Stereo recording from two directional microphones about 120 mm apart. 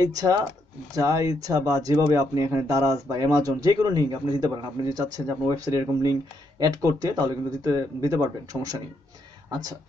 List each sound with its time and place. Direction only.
0.0 s speech: 30° right (ahead or behind)